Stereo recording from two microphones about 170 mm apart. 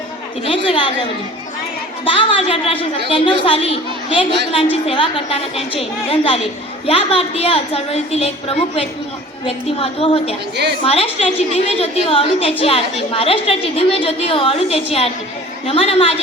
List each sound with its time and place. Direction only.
0.4 s a woman's voice: 35° left (ahead or behind)
2.0 s a woman's voice: 30° left (ahead or behind)